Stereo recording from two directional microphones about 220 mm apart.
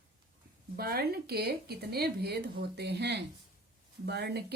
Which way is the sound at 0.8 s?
45° right (ahead or behind).